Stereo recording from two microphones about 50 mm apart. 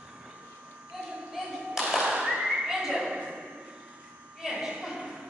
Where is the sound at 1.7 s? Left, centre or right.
Centre.